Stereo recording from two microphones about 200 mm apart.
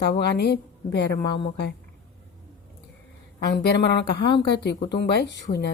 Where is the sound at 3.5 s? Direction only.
60° left (ahead or behind).